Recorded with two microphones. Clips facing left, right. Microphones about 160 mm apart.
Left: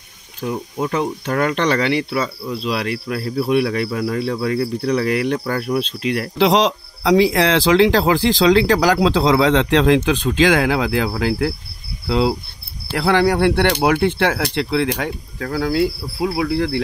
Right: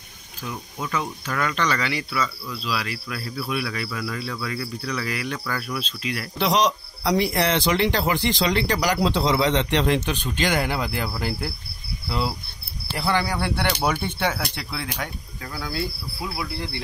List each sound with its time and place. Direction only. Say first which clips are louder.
0.4 s speech: left 10 dB; 45° left (ahead or behind)
2.2 s speech: left 7 dB; 40° left (ahead or behind)
2.6 s speech: left 6 dB; 60° left (ahead or behind)
6.3 s speech: left 5 dB; 90° left